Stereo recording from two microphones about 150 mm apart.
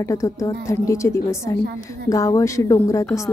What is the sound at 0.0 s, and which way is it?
A woman's voice, 20° left (ahead or behind).